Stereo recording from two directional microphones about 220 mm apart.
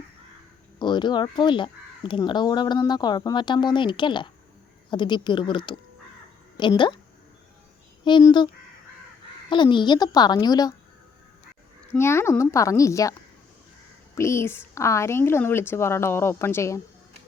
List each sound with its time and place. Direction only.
0.8 s speech: 20° left (ahead or behind)
8.0 s speech: 20° left (ahead or behind)
9.5 s speech: 20° left (ahead or behind)
11.9 s a woman's voice: 10° left (ahead or behind)
14.2 s a woman's voice: 10° left (ahead or behind)